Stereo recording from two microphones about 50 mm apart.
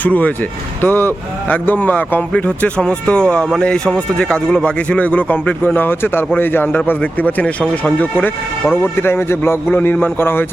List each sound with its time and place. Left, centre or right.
0.0 s a man's voice: left
0.8 s a man's voice: left
2.3 s a man's voice: left
7.0 s a man's voice: left
8.7 s a man's voice: left